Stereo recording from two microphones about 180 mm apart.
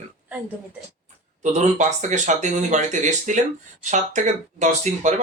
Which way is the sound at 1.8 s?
40° right (ahead or behind).